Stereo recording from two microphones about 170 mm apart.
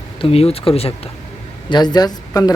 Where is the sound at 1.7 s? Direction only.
25° left (ahead or behind).